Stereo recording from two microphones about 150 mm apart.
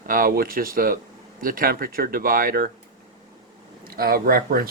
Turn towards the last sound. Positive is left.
turn(degrees=-75)  # may be behind; listen again after turning